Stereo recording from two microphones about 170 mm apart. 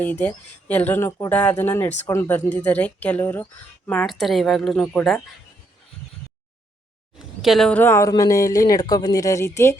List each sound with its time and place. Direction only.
0.0 s speech: 10° left (ahead or behind)
7.2 s speech: centre (ahead or behind); by 9.7 s 15° left (ahead or behind)